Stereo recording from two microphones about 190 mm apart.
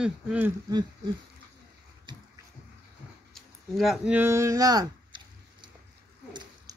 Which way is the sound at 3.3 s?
Centre (ahead or behind).